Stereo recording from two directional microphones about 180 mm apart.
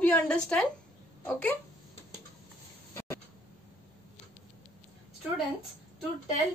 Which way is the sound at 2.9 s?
15° left (ahead or behind).